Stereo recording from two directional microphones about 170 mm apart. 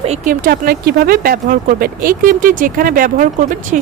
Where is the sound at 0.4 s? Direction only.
60° right (ahead or behind).